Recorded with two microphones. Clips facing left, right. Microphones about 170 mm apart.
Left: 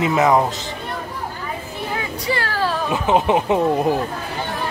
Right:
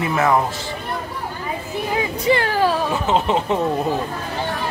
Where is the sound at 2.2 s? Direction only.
20° right (ahead or behind).